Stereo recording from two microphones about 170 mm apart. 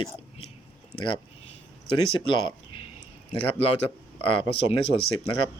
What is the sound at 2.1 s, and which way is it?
Speech, 30° left (ahead or behind).